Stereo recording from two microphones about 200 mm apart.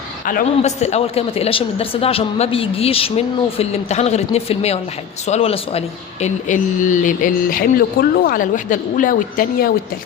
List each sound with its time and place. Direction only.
0.3 s a woman's voice: 40° left (ahead or behind)